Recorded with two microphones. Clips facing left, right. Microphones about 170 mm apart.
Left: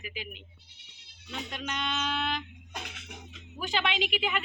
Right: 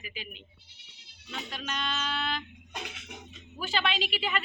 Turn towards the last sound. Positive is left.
turn(degrees=15)  # may be behind; listen again after turning